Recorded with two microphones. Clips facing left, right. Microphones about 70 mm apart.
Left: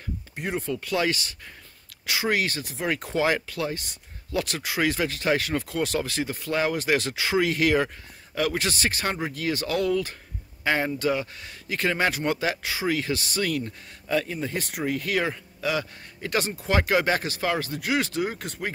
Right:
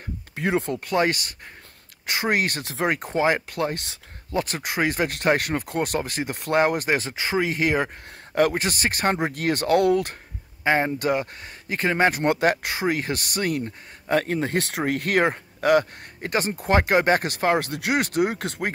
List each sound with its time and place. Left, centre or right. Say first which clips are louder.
0.4 s speech: right 5 dB; right
0.7 s speech: right 3 dB; right
3.4 s speech: right 3 dB; right
6.3 s speech: right 8 dB; right
6.6 s speech: right 2 dB; right
7.0 s speech: even; right
8.4 s speech: right 5 dB; right
9.2 s speech: right 4 dB; right
10.6 s speech: right 4 dB; right
11.0 s speech: right 2 dB; right
12.2 s speech: right 5 dB; right
14.2 s speech: right 6 dB; right
14.9 s speech: right 4 dB; right
17.6 s speech: right 3 dB; right